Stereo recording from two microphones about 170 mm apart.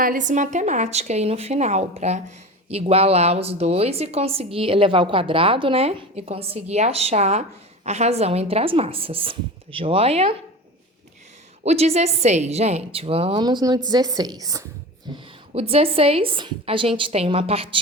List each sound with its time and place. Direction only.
0.0 s speech: 50° right (ahead or behind)
11.6 s a woman's voice: 40° right (ahead or behind); by 14.7 s 20° right (ahead or behind)
15.5 s speech: 35° right (ahead or behind)